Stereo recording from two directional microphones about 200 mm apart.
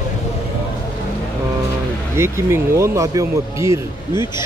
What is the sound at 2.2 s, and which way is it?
Speech, 15° right (ahead or behind).